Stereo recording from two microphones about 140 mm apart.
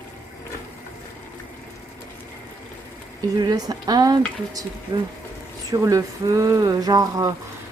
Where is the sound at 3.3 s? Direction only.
30° right (ahead or behind).